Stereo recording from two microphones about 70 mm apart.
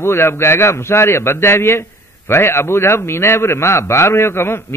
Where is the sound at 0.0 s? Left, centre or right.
Left.